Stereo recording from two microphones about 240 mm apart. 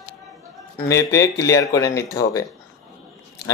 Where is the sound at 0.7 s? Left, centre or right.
Centre.